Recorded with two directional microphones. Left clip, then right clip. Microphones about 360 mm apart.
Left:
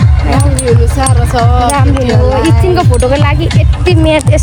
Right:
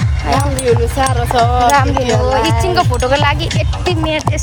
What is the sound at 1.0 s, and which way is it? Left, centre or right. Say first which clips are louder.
Speech: even; right.